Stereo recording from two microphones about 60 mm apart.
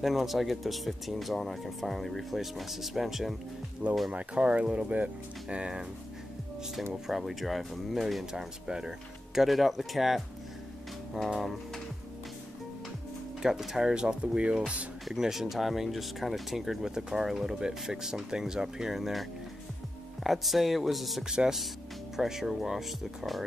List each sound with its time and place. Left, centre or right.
0.0 s speech: centre
4.1 s speech: centre
6.7 s speech: centre
11.3 s speech: centre
13.4 s speech: centre
15.0 s speech: centre
20.2 s speech: centre